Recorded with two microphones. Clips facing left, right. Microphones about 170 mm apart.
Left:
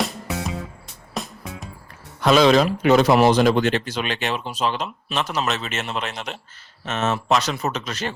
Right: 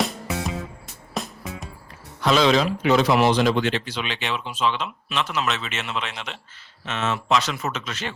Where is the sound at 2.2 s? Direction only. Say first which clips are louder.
Left 4 dB; 50° left (ahead or behind).